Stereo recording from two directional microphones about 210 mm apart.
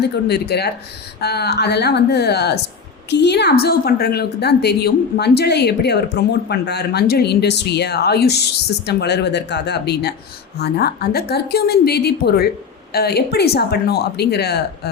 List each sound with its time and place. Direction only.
0.3 s a woman's voice: 50° left (ahead or behind)